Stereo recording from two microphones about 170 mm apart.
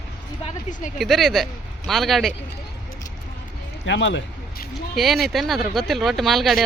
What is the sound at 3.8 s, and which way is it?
Speech, 90° left.